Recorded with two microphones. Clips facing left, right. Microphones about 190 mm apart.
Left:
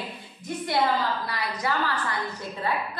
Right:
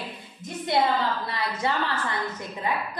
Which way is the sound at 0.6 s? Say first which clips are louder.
Right 1 dB; 20° right (ahead or behind).